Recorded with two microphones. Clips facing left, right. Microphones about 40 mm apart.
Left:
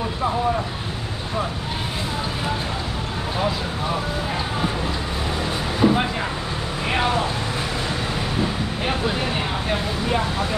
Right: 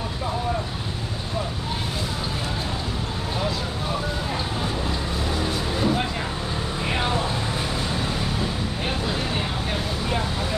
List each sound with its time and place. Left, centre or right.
5.8 s vehicle: left
9.7 s vehicle: centre